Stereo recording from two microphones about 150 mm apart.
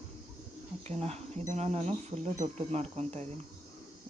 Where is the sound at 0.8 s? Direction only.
45° right (ahead or behind).